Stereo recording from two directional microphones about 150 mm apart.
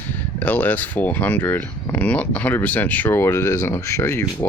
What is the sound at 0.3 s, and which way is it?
Speech, 10° left (ahead or behind).